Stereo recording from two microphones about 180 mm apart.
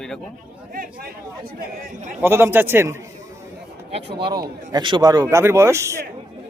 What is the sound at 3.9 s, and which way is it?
A man's voice, 30° right (ahead or behind).